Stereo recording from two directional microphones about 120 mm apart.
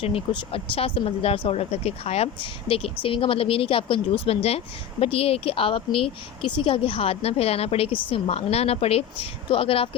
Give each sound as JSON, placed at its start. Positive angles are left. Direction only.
{"t": 0.0, "sound": "a woman's voice", "side_deg": 50}